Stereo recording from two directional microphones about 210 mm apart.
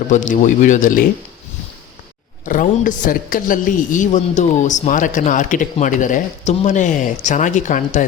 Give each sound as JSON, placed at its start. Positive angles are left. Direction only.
{"t": 0.1, "sound": "speech", "side_deg": 35}
{"t": 2.5, "sound": "speech", "side_deg": 40}